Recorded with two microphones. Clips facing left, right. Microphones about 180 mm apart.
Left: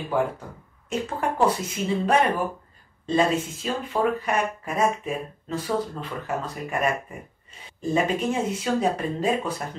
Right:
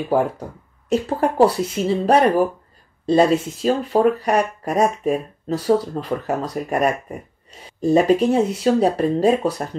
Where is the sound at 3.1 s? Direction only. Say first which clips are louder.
Right 7 dB; 35° right (ahead or behind).